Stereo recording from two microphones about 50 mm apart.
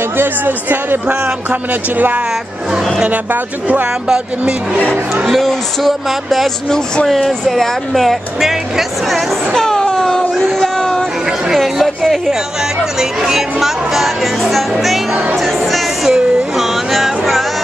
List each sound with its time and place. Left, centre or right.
0.2 s speech: right
5.4 s speech: centre
9.6 s a sound: centre
11.5 s chatter: centre
13.2 s speech: centre
15.1 s music: centre